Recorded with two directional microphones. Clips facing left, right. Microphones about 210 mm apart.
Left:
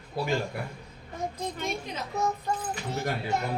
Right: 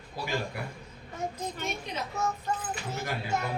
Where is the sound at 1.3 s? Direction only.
35° left (ahead or behind).